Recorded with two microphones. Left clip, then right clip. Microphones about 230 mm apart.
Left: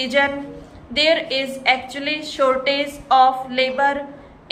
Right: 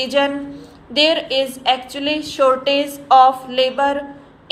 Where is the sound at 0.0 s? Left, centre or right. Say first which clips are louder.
Right 1 dB; right.